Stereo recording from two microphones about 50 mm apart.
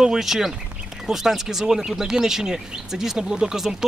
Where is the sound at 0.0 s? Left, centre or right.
Centre.